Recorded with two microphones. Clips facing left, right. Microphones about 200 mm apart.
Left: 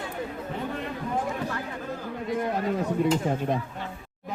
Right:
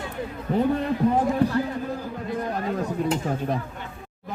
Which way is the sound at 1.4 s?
65° right (ahead or behind).